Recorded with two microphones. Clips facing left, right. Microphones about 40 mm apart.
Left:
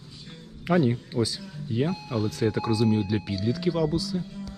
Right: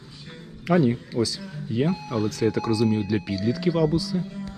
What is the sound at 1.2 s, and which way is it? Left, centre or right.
Speech, centre.